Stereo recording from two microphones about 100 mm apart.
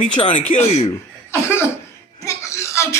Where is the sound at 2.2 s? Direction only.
30° left (ahead or behind).